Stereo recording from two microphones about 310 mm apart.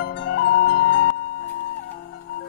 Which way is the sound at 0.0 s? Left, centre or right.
Left.